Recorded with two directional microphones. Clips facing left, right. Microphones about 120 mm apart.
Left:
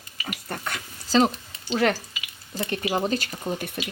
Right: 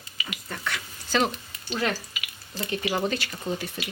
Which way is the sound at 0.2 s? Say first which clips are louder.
Left 3 dB; 45° left (ahead or behind).